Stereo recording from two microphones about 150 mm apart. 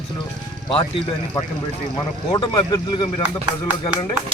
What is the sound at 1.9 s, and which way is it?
A man's voice, 30° left (ahead or behind).